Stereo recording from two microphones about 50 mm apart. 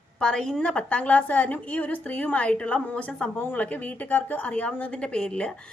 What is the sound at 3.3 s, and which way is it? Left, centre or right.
A woman's voice, left.